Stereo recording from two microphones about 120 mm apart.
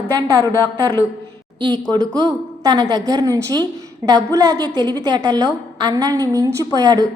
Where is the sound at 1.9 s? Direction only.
35° right (ahead or behind).